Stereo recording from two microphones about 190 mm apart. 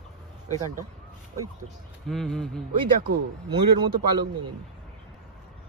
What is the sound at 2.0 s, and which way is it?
Speech, centre (ahead or behind).